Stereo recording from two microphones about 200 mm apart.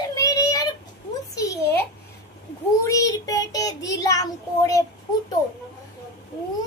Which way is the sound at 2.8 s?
15° left (ahead or behind).